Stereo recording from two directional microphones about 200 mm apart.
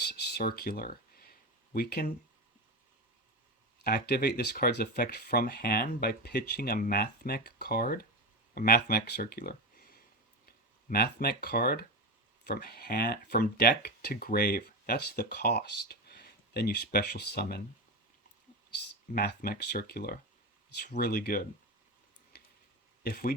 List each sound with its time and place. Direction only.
0.0 s a sound: 50° left (ahead or behind)
3.8 s speech: 50° left (ahead or behind)
19.1 s speech: 50° left (ahead or behind)
23.0 s speech: 50° left (ahead or behind)